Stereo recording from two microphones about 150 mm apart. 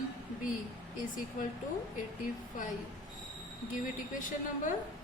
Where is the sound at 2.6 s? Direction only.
60° left (ahead or behind).